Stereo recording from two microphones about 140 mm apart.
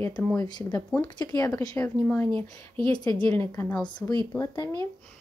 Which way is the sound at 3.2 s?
15° left (ahead or behind).